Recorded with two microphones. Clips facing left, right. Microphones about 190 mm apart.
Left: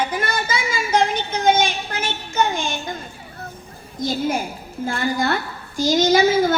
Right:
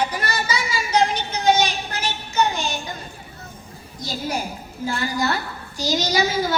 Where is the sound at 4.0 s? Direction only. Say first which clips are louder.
Left 5 dB; 50° left (ahead or behind).